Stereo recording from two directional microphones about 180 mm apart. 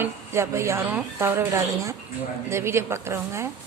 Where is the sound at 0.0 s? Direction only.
15° right (ahead or behind).